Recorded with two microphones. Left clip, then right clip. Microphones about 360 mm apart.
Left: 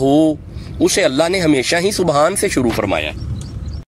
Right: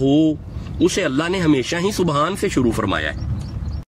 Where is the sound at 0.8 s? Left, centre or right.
Centre.